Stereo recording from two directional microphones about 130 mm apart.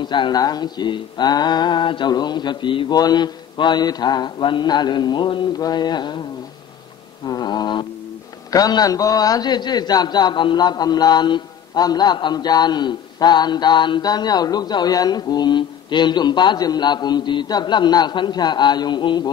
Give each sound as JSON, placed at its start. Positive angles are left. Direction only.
{"t": 0.0, "sound": "a man's voice", "side_deg": 35}
{"t": 7.2, "sound": "a man's voice", "side_deg": 30}